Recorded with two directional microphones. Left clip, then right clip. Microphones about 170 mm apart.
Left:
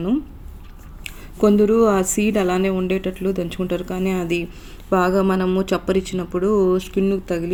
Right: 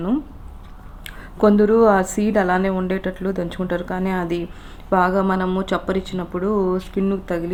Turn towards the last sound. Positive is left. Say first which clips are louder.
# left 2 dB
turn(degrees=25)  # may be behind; listen again after turning